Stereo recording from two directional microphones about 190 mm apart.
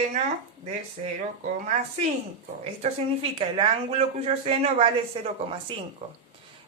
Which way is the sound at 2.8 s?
30° right (ahead or behind).